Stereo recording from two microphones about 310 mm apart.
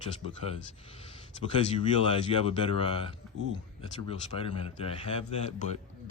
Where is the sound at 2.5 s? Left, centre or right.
Centre.